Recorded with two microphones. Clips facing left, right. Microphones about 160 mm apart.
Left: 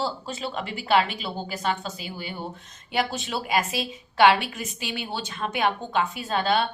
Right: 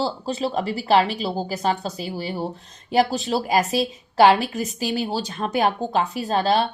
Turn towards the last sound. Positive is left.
turn(degrees=-35)  # may be behind; listen again after turning